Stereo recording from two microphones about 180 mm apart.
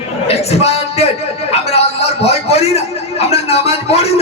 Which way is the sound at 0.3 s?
35° left (ahead or behind).